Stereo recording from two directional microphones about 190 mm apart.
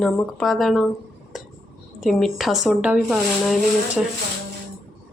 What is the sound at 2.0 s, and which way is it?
Speech, centre (ahead or behind).